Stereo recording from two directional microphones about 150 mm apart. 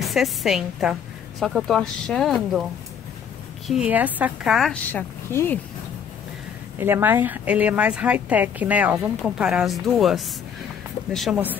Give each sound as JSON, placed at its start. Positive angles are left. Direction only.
{"t": 0.0, "sound": "a woman's voice", "side_deg": 0}
{"t": 3.6, "sound": "a woman's voice", "side_deg": -5}
{"t": 5.3, "sound": "speech", "side_deg": 15}
{"t": 6.8, "sound": "a woman's voice", "side_deg": -15}